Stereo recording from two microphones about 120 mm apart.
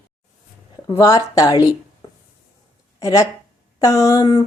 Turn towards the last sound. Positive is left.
turn(degrees=30)  # may be behind; listen again after turning